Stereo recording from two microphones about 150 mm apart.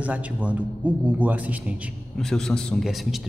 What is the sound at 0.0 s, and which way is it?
A man's voice, 10° right (ahead or behind).